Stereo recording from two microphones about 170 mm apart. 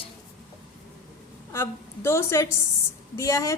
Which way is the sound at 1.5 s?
15° left (ahead or behind).